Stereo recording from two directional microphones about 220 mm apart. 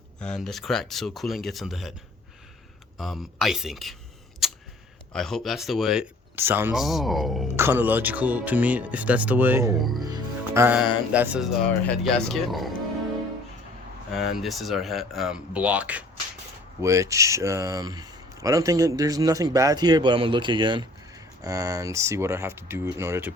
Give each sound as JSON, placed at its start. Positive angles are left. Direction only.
{"t": 0.2, "sound": "speech", "side_deg": 5}
{"t": 3.0, "sound": "speech", "side_deg": 0}
{"t": 4.4, "sound": "a sound", "side_deg": 0}
{"t": 5.1, "sound": "speech", "side_deg": 0}
{"t": 7.5, "sound": "speech", "side_deg": -10}
{"t": 9.7, "sound": "speech", "side_deg": 0}
{"t": 10.0, "sound": "music", "side_deg": -15}
{"t": 11.1, "sound": "speech", "side_deg": -5}
{"t": 14.1, "sound": "speech", "side_deg": 0}